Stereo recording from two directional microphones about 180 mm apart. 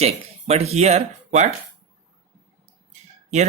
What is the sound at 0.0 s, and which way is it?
Speech, 35° right (ahead or behind).